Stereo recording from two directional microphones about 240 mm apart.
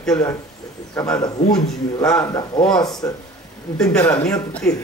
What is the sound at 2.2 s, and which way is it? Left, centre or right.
Speech, centre.